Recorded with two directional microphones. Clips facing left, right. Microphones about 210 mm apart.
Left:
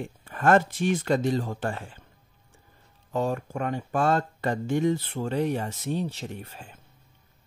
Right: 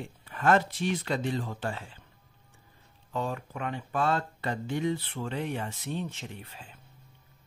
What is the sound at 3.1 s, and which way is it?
Speech, 45° left (ahead or behind).